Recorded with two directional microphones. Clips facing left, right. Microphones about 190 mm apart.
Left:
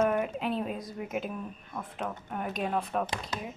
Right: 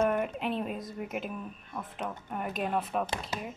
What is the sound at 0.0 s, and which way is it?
A woman's voice, centre (ahead or behind).